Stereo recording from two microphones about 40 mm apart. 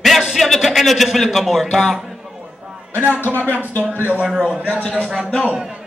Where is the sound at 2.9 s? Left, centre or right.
Right.